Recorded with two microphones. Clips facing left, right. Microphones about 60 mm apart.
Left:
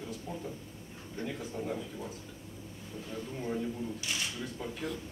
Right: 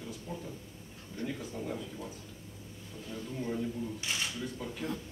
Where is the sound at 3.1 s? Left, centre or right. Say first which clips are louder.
Even; centre.